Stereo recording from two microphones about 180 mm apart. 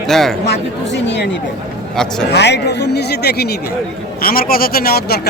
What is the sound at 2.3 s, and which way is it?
Speech, 70° left (ahead or behind).